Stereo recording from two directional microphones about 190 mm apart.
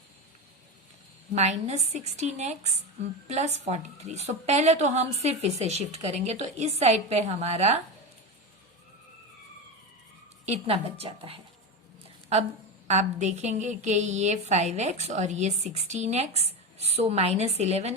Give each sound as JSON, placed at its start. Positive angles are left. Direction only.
{"t": 1.4, "sound": "a woman's voice", "side_deg": -35}
{"t": 10.4, "sound": "a woman's voice", "side_deg": -35}
{"t": 12.9, "sound": "a woman's voice", "side_deg": -35}